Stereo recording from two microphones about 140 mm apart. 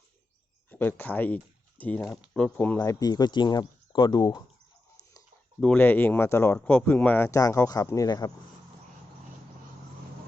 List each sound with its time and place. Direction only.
0.7 s speech: 15° left (ahead or behind)
2.0 s speech: centre (ahead or behind)
2.7 s speech: 25° left (ahead or behind)
5.5 s speech: 5° left (ahead or behind); by 8.3 s 25° left (ahead or behind)